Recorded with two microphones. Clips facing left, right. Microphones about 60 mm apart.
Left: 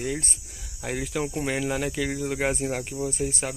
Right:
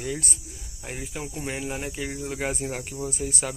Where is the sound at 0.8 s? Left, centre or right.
Left.